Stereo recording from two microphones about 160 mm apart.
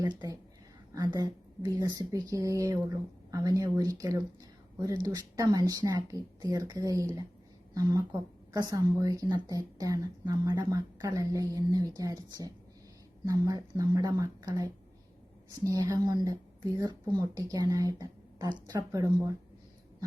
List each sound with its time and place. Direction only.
0.0 s a woman's voice: 25° right (ahead or behind)